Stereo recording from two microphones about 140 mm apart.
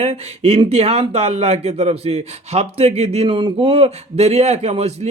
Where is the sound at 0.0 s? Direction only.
45° right (ahead or behind).